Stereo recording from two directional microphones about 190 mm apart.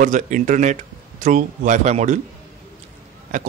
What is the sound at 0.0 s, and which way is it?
Speech, 40° right (ahead or behind).